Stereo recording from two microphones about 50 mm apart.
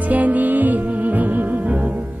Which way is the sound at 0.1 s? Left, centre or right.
Right.